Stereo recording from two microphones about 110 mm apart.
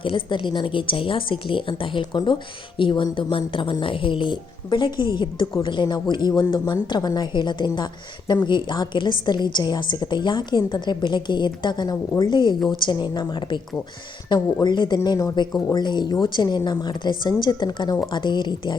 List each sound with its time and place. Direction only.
0.0 s a woman's voice: 50° left (ahead or behind)